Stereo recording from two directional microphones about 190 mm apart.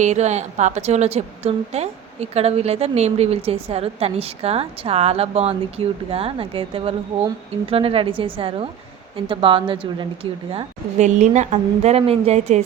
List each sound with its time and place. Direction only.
0.0 s a woman's voice: 35° right (ahead or behind)